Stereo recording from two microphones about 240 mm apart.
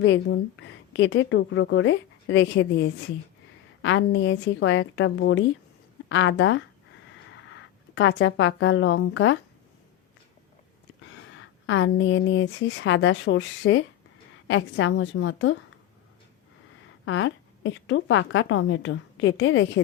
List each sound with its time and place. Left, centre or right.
0.0 s a woman's voice: left
11.6 s a woman's voice: left
17.1 s a woman's voice: left